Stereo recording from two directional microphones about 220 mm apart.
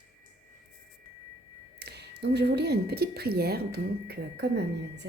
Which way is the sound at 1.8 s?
50° right (ahead or behind).